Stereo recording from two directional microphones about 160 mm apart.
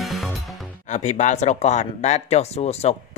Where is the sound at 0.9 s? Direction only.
50° left (ahead or behind).